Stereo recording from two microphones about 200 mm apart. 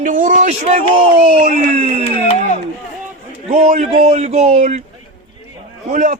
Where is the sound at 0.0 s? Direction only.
40° right (ahead or behind).